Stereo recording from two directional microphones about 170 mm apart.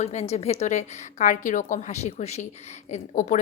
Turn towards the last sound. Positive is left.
turn(degrees=45)  # may be behind; listen again after turning